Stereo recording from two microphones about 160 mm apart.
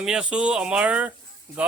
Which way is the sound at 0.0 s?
5° right (ahead or behind).